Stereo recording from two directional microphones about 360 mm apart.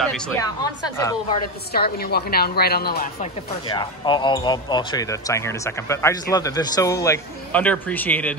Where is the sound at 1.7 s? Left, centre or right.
Left.